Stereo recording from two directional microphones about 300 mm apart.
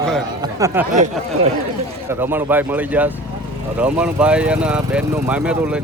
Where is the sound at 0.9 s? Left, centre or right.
Right.